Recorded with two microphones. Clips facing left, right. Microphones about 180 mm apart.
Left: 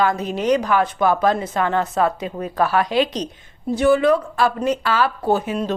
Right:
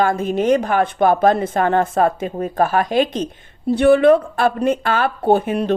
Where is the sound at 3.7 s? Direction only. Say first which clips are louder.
Right 4 dB; 60° right (ahead or behind).